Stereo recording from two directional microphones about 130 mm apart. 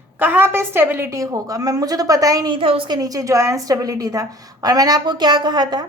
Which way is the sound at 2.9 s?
30° right (ahead or behind).